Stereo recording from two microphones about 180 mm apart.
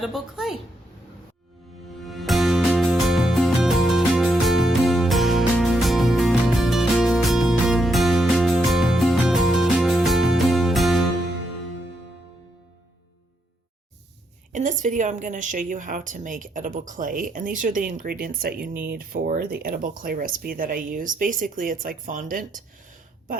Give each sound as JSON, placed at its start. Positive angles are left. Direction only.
{"t": 0.0, "sound": "a woman's voice", "side_deg": 0}
{"t": 2.0, "sound": "music", "side_deg": 0}
{"t": 14.5, "sound": "a woman's voice", "side_deg": -45}